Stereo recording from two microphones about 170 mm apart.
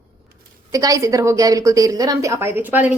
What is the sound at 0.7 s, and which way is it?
A woman's voice, 20° right (ahead or behind).